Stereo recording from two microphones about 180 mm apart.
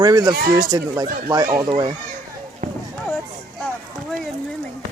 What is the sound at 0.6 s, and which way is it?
Speech, 20° right (ahead or behind).